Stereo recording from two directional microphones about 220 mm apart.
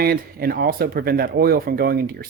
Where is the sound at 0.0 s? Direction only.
45° right (ahead or behind).